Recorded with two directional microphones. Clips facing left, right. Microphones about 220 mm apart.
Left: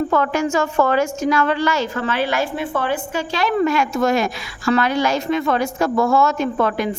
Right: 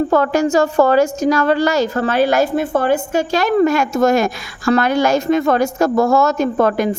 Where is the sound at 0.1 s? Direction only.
40° right (ahead or behind).